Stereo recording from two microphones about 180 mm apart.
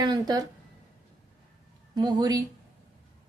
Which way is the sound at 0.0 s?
20° right (ahead or behind).